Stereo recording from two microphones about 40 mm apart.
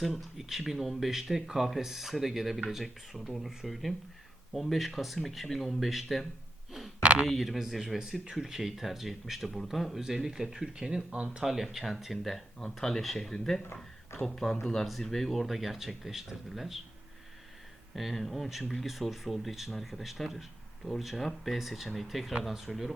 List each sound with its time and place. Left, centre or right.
0.1 s speech: centre
6.7 s a sound: centre
7.0 s a sound: right
7.3 s speech: centre
8.2 s speech: centre
10.8 s speech: right
11.4 s speech: centre
17.9 s speech: centre